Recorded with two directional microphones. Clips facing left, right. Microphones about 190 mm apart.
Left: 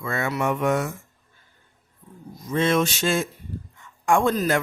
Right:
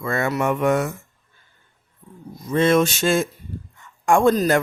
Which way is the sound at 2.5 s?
50° right (ahead or behind).